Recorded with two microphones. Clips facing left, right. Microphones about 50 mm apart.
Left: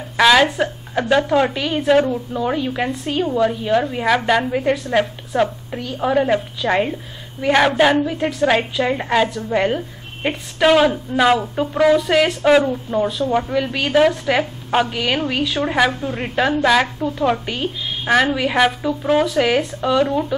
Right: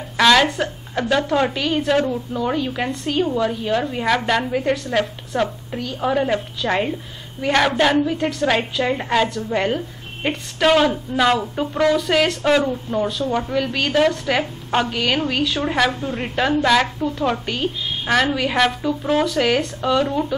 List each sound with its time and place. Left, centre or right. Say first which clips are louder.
0.2 s a woman's voice: left 2 dB; centre